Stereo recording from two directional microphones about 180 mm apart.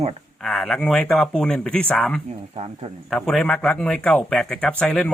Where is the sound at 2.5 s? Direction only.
35° right (ahead or behind).